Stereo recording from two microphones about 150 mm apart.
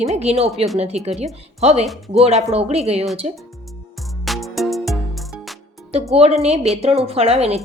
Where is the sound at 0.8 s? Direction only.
45° right (ahead or behind).